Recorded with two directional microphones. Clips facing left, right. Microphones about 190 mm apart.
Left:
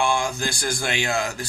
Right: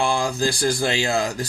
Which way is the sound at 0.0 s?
35° right (ahead or behind).